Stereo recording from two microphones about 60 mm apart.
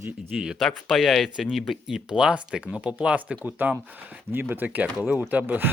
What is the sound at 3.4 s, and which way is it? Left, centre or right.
Speech, right.